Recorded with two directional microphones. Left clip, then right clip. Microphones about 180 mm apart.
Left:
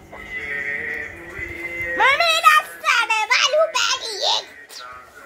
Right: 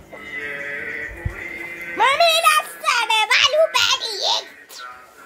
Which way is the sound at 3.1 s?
20° right (ahead or behind).